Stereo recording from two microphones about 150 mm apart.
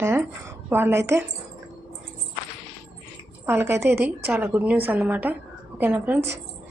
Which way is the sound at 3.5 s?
15° right (ahead or behind).